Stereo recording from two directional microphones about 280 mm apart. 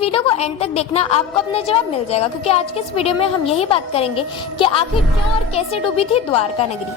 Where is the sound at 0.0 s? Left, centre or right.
Centre.